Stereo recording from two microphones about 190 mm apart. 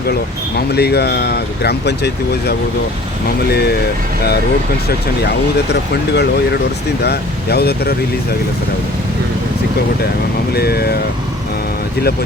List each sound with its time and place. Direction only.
0.7 s speech: 60° left (ahead or behind)
5.2 s speech: 60° left (ahead or behind)
10.5 s speech: 55° left (ahead or behind)